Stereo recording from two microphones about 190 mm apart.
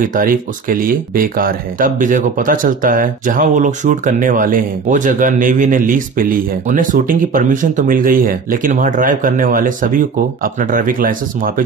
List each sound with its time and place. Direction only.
0.0 s speech: 45° right (ahead or behind)